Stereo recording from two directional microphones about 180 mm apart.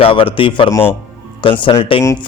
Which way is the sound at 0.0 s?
30° left (ahead or behind).